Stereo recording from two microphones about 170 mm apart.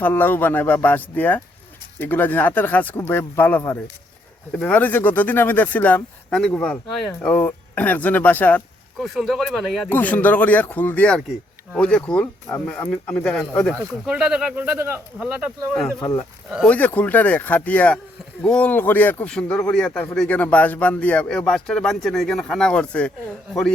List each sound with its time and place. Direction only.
0.0 s speech: 10° left (ahead or behind)
14.0 s speech: 5° right (ahead or behind)
16.0 s speech: 20° left (ahead or behind)
16.6 s speech: 10° left (ahead or behind)